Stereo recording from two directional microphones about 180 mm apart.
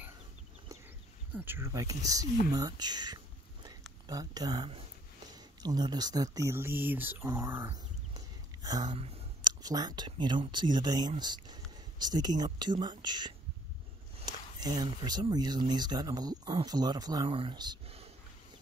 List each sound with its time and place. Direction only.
1.3 s speech: 10° right (ahead or behind)
9.0 s a sound: 35° right (ahead or behind)
9.5 s speech: 20° right (ahead or behind)